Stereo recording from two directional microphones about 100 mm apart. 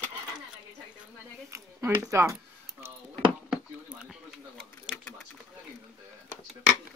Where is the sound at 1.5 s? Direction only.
30° right (ahead or behind).